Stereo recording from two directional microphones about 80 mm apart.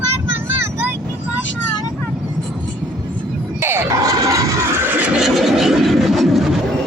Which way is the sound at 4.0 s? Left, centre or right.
Right.